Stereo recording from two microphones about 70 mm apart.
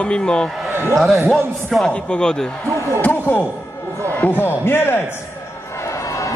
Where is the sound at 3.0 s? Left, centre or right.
Left.